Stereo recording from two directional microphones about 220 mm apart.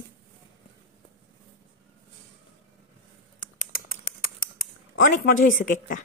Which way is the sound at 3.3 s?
40° left (ahead or behind).